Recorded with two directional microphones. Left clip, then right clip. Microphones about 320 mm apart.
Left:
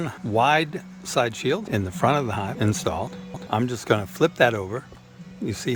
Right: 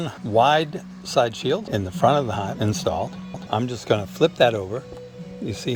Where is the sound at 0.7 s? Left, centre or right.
Centre.